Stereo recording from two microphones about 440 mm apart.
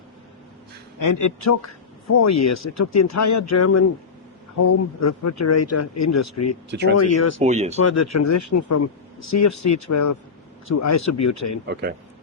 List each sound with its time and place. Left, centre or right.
0.9 s speech: left
6.7 s speech: right
6.9 s speech: left
7.4 s speech: centre
7.8 s speech: left
11.7 s speech: right